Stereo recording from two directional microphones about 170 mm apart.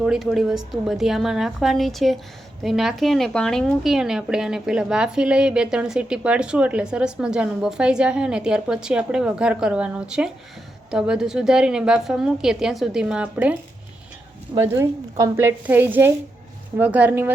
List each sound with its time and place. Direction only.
0.0 s speech: centre (ahead or behind)